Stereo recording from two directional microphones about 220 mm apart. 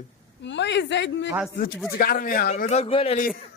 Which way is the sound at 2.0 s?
40° left (ahead or behind).